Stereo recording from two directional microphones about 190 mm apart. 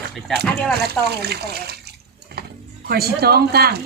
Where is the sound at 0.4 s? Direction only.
5° left (ahead or behind).